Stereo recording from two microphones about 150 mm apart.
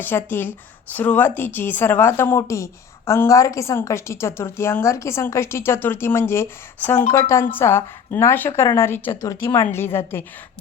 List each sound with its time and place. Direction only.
0.0 s a woman's voice: 15° left (ahead or behind)